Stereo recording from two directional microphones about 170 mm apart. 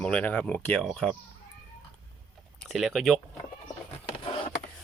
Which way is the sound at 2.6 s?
Centre (ahead or behind).